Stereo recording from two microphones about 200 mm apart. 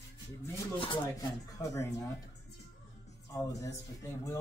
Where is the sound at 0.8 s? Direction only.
20° left (ahead or behind).